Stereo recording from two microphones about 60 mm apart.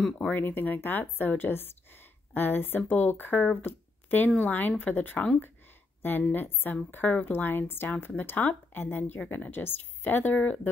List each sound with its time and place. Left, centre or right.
0.3 s speech: left
3.6 s a sound: left
4.3 s speech: left